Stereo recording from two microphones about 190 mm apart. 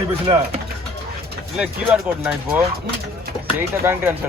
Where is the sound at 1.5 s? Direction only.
5° right (ahead or behind).